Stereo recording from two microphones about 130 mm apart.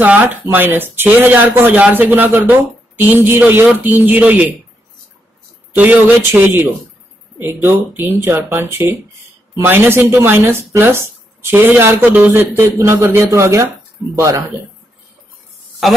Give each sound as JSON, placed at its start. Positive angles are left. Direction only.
{"t": 0.0, "sound": "speech", "side_deg": -15}
{"t": 5.8, "sound": "speech", "side_deg": -15}
{"t": 15.8, "sound": "a woman's voice", "side_deg": 0}